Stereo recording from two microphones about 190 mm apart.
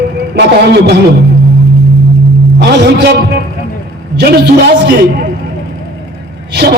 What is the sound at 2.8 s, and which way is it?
A man's voice, 60° right (ahead or behind).